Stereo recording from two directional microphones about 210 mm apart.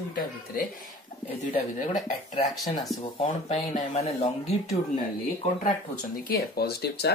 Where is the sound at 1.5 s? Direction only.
35° left (ahead or behind).